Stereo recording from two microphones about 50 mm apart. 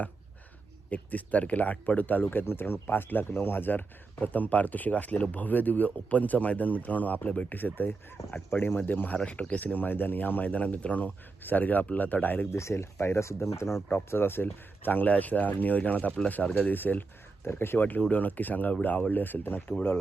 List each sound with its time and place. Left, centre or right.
0.9 s speech: left
9.1 s speech: left
12.5 s speech: left
13.9 s speech: left
17.4 s speech: left
18.1 s speech: left